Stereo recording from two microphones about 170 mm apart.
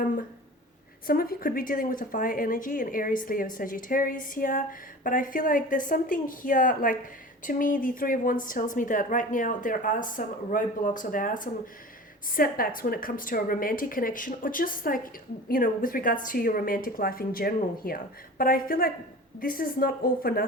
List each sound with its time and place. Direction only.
1.0 s a woman's voice: 60° left (ahead or behind)